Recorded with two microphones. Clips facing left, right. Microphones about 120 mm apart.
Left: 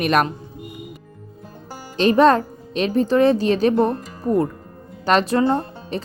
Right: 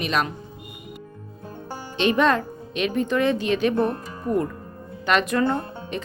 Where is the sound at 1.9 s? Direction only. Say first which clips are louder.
Left 6 dB; 40° left (ahead or behind).